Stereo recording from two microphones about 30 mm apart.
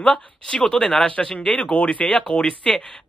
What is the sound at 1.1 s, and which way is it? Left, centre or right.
Speech, left.